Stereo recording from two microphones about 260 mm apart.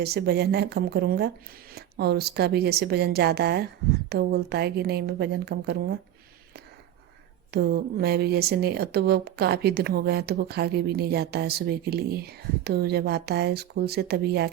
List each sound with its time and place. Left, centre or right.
0.0 s speech: right
7.5 s speech: right